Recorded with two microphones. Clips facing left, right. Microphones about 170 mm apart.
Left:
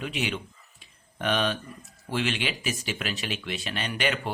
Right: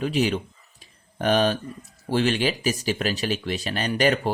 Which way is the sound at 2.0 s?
35° right (ahead or behind).